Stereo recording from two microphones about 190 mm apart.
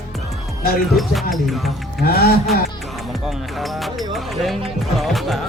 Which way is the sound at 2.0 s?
55° left (ahead or behind).